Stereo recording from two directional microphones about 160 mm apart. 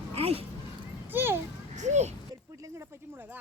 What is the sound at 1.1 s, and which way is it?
Children playing, 15° right (ahead or behind).